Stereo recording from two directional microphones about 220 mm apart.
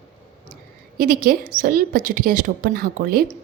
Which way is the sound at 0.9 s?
40° right (ahead or behind).